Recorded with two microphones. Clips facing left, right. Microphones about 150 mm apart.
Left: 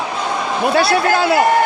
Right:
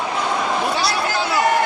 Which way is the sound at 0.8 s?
55° left (ahead or behind).